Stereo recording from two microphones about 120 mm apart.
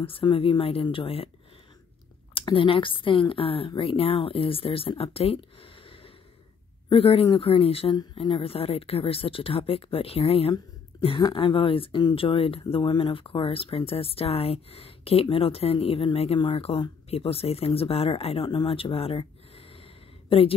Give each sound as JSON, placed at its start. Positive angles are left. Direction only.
{"t": 0.0, "sound": "speech", "side_deg": 50}
{"t": 2.3, "sound": "a woman's voice", "side_deg": 45}